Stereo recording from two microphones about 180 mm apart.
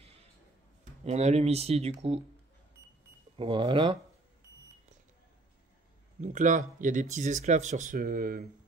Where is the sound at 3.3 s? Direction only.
30° right (ahead or behind).